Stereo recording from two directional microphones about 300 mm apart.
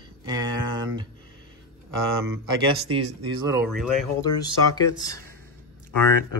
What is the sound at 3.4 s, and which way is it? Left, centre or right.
Speech, centre.